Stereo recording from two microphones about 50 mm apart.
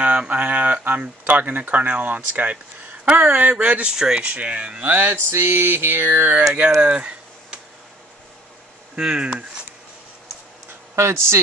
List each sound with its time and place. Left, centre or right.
0.0 s speech: right
4.8 s speech: right
5.3 s a sound: right
6.0 s speech: right
6.5 s a sound: right
8.9 s speech: centre
11.0 s speech: right